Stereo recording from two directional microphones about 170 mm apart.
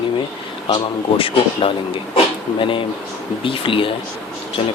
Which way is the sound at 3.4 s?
30° left (ahead or behind).